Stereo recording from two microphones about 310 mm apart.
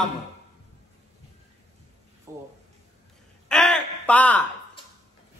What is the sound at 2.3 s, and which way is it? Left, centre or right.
Speech, centre.